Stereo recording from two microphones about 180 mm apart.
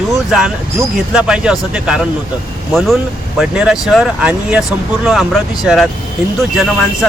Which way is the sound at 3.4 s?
5° right (ahead or behind).